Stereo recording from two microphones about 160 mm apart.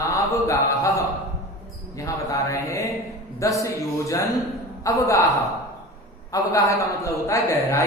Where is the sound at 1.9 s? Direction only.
20° left (ahead or behind).